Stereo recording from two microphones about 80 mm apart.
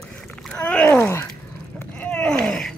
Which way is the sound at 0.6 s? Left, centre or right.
Centre.